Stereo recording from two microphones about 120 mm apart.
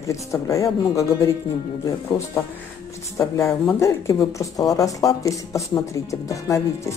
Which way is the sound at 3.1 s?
25° left (ahead or behind).